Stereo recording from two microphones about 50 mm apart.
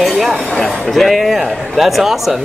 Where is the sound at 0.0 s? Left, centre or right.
Centre.